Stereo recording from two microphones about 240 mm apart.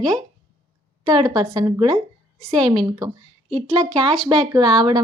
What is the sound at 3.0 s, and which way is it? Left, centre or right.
Speech, centre.